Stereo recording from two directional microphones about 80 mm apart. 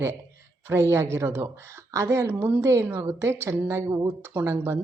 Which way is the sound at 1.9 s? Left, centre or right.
Right.